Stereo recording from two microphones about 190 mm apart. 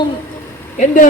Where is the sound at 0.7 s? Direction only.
40° left (ahead or behind).